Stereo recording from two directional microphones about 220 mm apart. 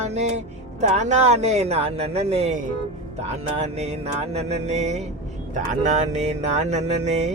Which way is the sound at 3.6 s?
30° right (ahead or behind).